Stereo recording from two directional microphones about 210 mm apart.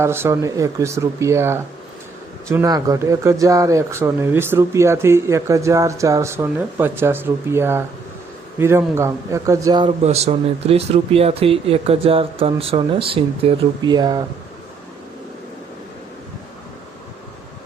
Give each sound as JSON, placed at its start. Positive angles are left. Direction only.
{"t": 0.0, "sound": "speech", "side_deg": -10}